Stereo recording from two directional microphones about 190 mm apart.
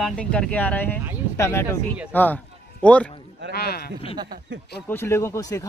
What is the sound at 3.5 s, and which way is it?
Speech, 55° left (ahead or behind).